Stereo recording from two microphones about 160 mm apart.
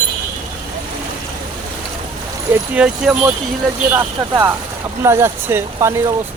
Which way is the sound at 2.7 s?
5° right (ahead or behind).